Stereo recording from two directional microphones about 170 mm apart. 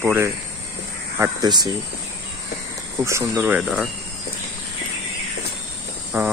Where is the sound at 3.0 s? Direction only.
15° right (ahead or behind).